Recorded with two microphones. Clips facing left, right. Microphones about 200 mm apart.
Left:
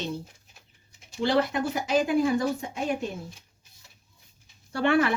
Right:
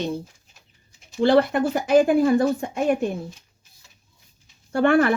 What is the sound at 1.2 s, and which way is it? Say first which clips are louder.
Speech: right 7 dB; 55° right (ahead or behind).